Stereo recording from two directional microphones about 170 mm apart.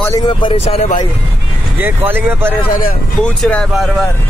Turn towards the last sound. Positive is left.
turn(degrees=0)  # may be behind; listen again after turning